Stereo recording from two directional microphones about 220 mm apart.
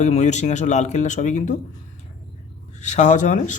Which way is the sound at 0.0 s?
30° left (ahead or behind).